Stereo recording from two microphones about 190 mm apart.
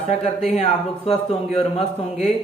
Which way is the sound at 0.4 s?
30° left (ahead or behind).